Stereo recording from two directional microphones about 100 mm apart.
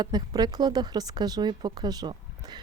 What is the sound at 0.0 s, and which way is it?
Speech, 45° right (ahead or behind).